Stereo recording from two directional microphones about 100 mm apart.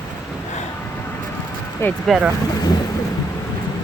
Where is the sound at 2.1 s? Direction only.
10° right (ahead or behind).